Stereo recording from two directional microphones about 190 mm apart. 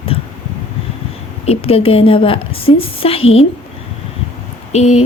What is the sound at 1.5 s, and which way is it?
A woman's voice, 30° left (ahead or behind).